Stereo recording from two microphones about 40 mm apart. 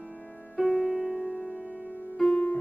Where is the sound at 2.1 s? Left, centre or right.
Centre.